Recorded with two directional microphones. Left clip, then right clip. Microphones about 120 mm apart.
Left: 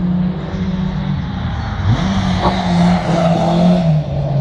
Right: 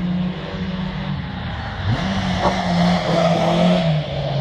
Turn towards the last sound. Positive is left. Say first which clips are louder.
# left 2 dB
turn(degrees=-20)  # may be behind; listen again after turning